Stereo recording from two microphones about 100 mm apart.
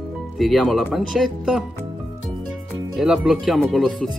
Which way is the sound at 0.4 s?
Centre (ahead or behind).